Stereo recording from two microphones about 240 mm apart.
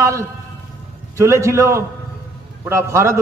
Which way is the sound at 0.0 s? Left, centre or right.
Centre.